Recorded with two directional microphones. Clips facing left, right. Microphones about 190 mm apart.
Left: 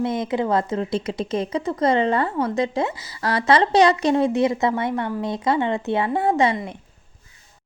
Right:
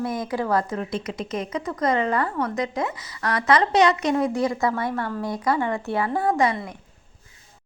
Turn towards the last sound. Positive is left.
turn(degrees=25)  # may be behind; listen again after turning